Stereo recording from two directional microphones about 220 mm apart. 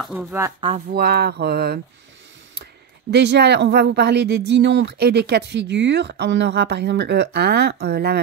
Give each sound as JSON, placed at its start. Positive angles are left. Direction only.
{"t": 0.0, "sound": "speech", "side_deg": 0}
{"t": 0.6, "sound": "speech", "side_deg": -25}
{"t": 0.8, "sound": "speech", "side_deg": -45}